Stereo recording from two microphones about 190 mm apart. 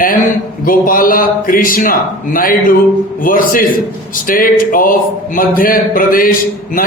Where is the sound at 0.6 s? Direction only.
45° left (ahead or behind).